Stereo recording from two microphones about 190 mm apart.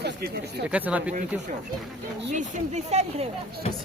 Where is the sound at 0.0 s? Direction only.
60° right (ahead or behind).